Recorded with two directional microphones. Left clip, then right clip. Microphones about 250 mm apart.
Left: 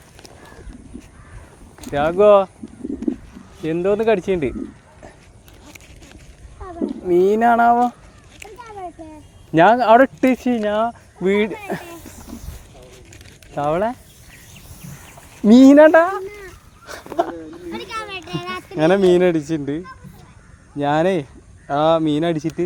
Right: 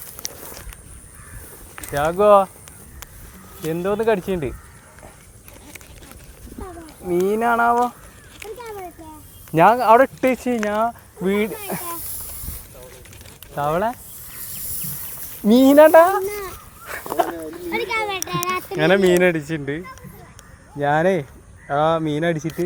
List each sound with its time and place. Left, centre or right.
1.9 s speech: left
3.7 s speech: left
7.1 s speech: left
9.5 s speech: left
13.6 s speech: left
15.4 s speech: left
17.2 s a sound: left
20.7 s speech: left